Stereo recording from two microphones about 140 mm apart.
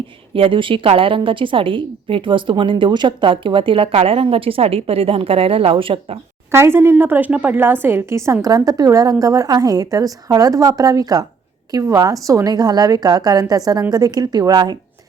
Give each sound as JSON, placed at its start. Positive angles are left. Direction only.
{"t": 0.3, "sound": "a woman's voice", "side_deg": -40}
{"t": 6.5, "sound": "a woman's voice", "side_deg": -15}